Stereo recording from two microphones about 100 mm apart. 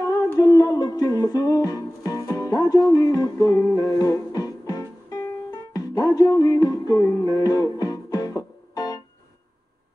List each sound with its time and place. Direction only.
0.0 s humming: 35° left (ahead or behind)
0.4 s music: 35° left (ahead or behind)